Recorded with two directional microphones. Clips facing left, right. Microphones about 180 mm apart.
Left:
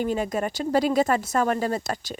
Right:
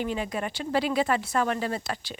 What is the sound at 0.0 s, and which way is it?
Speech, 45° left (ahead or behind).